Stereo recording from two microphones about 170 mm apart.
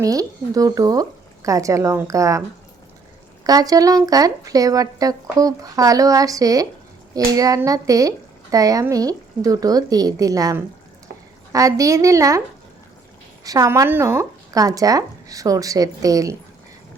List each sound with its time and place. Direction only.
0.0 s speech: 20° right (ahead or behind)
3.4 s speech: 20° right (ahead or behind)
13.4 s speech: 20° right (ahead or behind)